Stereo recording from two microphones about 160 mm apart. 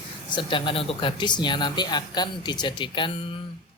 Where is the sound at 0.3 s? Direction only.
30° left (ahead or behind).